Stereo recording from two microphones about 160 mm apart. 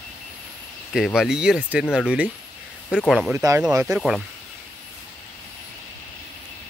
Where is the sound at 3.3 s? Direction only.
20° right (ahead or behind).